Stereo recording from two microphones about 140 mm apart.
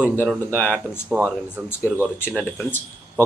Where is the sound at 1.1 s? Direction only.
10° right (ahead or behind).